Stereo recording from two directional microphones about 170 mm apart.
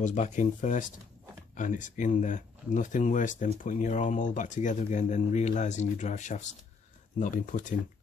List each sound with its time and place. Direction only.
0.0 s speech: 45° left (ahead or behind)